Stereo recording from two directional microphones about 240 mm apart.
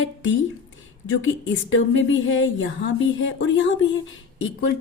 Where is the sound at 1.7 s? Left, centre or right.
Left.